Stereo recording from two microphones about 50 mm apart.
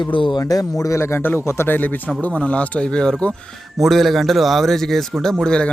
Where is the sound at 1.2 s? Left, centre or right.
Left.